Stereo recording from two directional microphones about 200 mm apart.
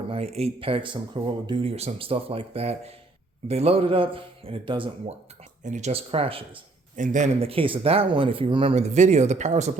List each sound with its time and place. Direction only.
0.1 s speech: 30° right (ahead or behind)
6.9 s speech: 40° right (ahead or behind)